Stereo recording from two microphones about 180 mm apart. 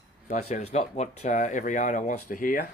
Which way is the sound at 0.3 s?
40° left (ahead or behind).